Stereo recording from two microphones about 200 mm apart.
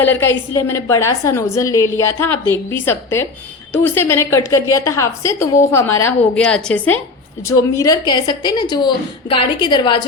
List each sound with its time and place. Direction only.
0.0 s a woman's voice: 10° left (ahead or behind)